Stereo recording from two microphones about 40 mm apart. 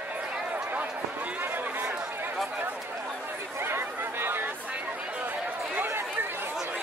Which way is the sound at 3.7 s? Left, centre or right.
Right.